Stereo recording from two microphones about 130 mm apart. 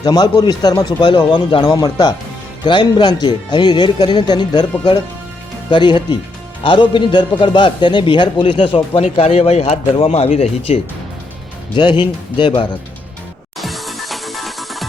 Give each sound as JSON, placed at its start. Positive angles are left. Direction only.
{"t": 0.0, "sound": "a man's voice", "side_deg": 30}
{"t": 5.7, "sound": "a man's voice", "side_deg": 35}
{"t": 9.0, "sound": "speech", "side_deg": 50}
{"t": 11.7, "sound": "a man's voice", "side_deg": 40}
{"t": 13.6, "sound": "music", "side_deg": 0}